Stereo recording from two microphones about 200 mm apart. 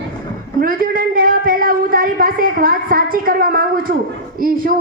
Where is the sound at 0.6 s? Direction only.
45° right (ahead or behind).